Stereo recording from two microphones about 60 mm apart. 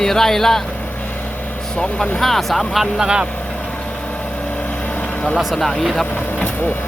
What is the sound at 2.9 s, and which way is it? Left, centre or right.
Speech, centre.